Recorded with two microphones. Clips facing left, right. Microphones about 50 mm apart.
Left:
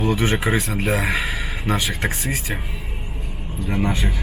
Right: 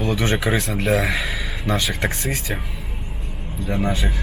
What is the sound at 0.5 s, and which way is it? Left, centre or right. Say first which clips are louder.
A man's voice: right 1 dB; centre.